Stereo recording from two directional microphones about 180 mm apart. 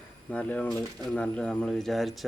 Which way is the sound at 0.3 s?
5° left (ahead or behind).